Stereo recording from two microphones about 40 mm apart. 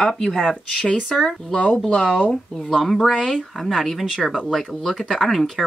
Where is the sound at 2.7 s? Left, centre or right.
Centre.